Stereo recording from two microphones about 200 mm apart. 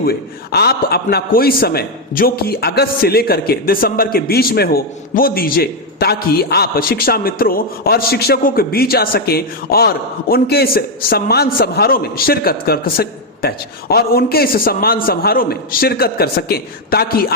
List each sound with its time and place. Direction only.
0.0 s a man's voice: 50° left (ahead or behind)